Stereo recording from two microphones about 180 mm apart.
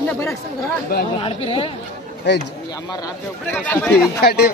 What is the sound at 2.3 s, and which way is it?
Speech, 70° left (ahead or behind).